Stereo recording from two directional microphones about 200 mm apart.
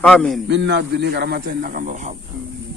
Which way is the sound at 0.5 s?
60° right (ahead or behind).